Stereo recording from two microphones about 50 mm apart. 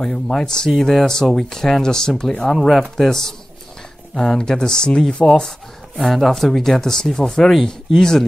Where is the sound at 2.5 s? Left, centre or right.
Centre.